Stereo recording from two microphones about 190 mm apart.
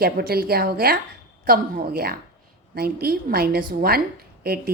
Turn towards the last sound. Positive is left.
turn(degrees=-55)  # may be behind; listen again after turning